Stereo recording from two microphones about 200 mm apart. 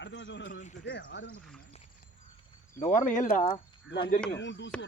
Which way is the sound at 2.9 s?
40° left (ahead or behind).